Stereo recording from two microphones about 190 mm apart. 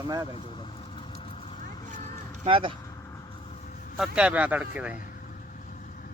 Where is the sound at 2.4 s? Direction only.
25° right (ahead or behind).